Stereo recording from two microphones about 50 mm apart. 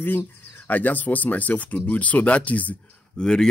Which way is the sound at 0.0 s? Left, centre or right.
Left.